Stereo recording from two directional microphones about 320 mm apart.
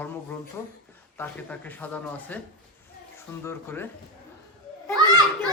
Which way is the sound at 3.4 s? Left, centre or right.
Centre.